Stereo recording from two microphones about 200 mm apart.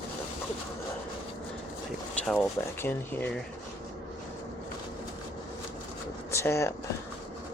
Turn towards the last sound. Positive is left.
turn(degrees=15)  # may be behind; listen again after turning